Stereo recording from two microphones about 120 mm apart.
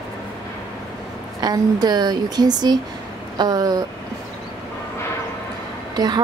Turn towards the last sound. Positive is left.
turn(degrees=-35)  # may be behind; listen again after turning